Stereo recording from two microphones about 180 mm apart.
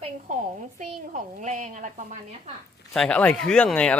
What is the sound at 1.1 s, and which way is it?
Speech, 45° right (ahead or behind).